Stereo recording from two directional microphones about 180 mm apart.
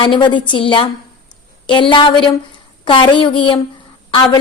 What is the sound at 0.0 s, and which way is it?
A woman's voice, 25° left (ahead or behind).